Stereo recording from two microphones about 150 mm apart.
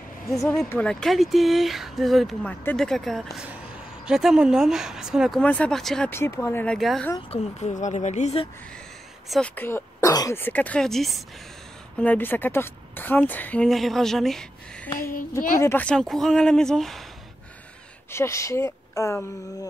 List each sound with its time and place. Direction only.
0.5 s speech: 10° left (ahead or behind)
5.4 s speech: 10° left (ahead or behind)
6.0 s a woman's voice: 15° left (ahead or behind)
7.2 s a woman's voice: 45° left (ahead or behind)
9.3 s a woman's voice: 10° left (ahead or behind)
12.0 s a woman's voice: 10° left (ahead or behind)
15.6 s speech: 10° left (ahead or behind)
18.1 s speech: 20° left (ahead or behind)